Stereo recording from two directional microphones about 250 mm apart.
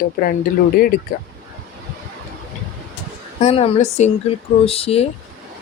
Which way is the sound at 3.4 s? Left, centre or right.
Left.